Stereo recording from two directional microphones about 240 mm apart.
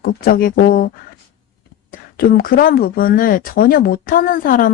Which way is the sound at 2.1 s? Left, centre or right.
Left.